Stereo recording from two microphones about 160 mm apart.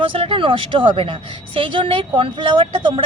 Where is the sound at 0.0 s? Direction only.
35° right (ahead or behind).